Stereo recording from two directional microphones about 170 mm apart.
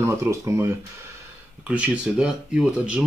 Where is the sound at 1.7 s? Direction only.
5° right (ahead or behind).